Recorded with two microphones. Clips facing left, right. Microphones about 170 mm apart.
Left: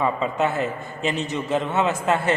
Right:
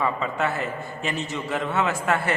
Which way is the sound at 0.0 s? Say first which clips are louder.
Left 3 dB; 20° left (ahead or behind).